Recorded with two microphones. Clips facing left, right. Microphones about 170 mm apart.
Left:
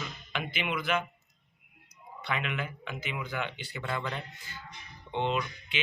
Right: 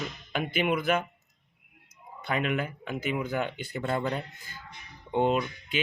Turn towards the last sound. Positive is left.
turn(degrees=-45)  # may be behind; listen again after turning